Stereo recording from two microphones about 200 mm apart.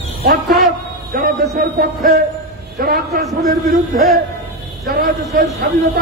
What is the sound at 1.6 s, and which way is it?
A man's voice, 50° right (ahead or behind).